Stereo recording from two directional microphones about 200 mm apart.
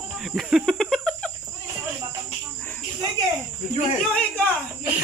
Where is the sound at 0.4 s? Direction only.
Centre (ahead or behind).